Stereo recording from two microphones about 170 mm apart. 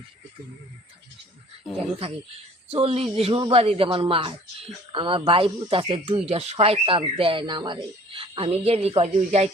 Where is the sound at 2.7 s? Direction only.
35° right (ahead or behind).